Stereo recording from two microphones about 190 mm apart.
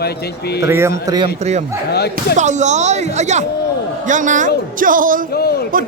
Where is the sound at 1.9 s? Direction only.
55° left (ahead or behind).